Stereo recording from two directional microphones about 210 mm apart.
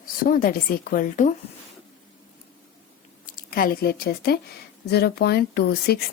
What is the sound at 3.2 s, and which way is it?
A woman's voice, 45° left (ahead or behind).